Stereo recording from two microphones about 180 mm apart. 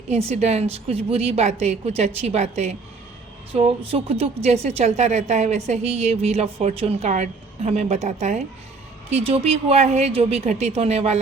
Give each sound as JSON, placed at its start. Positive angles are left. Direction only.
{"t": 0.1, "sound": "a woman's voice", "side_deg": -35}